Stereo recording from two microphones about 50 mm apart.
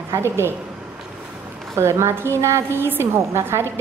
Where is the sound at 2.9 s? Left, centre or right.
Right.